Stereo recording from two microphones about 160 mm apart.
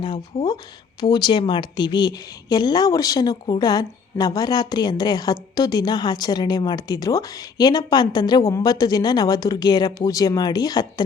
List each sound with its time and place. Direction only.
0.3 s speech: 40° left (ahead or behind)
1.1 s a woman's voice: 30° left (ahead or behind)